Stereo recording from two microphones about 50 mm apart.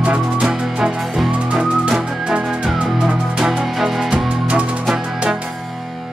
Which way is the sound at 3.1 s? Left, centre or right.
Centre.